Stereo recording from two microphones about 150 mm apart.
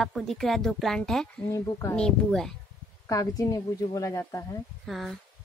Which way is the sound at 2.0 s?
5° left (ahead or behind).